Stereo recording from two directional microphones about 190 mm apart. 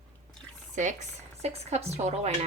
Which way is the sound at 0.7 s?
40° right (ahead or behind).